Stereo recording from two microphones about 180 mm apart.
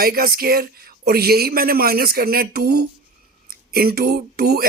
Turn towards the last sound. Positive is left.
turn(degrees=-60)  # may be behind; listen again after turning